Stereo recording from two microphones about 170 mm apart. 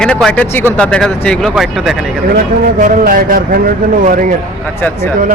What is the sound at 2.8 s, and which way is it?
A man's voice, 55° right (ahead or behind).